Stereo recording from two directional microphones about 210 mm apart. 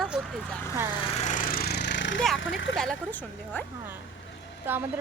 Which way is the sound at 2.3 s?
65° left (ahead or behind).